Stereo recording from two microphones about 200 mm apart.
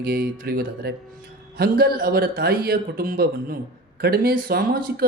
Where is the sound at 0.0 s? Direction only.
50° right (ahead or behind).